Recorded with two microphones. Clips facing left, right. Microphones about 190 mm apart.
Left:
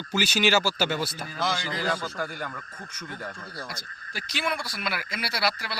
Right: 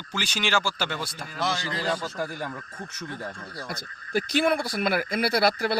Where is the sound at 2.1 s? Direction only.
25° right (ahead or behind).